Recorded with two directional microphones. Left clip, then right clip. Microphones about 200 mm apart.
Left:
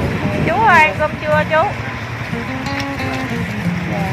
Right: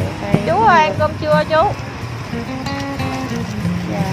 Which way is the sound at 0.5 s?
50° right (ahead or behind).